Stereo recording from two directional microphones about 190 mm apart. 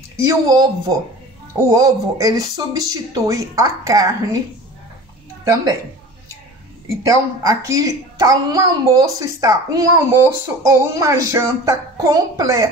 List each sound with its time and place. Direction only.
0.1 s a woman's voice: 15° right (ahead or behind)
5.4 s a woman's voice: 15° right (ahead or behind)
7.1 s a woman's voice: 15° right (ahead or behind)